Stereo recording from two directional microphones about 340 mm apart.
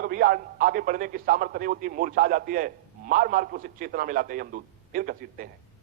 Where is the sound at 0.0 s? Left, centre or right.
Right.